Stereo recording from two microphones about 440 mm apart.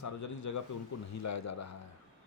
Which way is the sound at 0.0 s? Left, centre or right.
Left.